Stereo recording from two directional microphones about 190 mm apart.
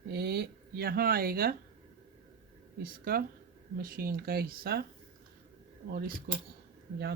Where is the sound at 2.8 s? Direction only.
50° right (ahead or behind).